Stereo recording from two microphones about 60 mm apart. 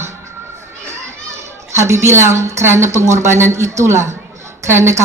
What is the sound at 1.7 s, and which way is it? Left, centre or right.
Speech, right.